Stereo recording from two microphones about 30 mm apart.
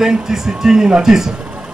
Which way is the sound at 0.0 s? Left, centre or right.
Centre.